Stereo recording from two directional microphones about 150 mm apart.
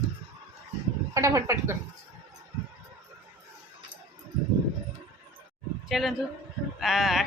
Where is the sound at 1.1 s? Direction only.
20° right (ahead or behind).